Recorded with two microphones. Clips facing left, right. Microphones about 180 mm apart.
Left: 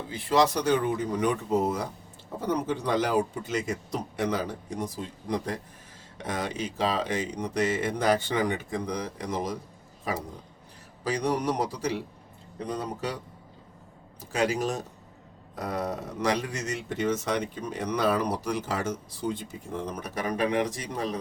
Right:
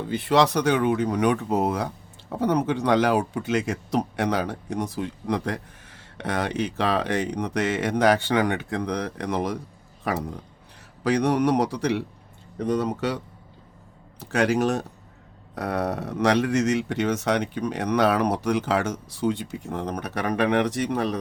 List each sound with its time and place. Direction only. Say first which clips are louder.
0.1 s speech: right 3 dB; 70° right (ahead or behind)
14.2 s speech: right 5 dB; 70° right (ahead or behind)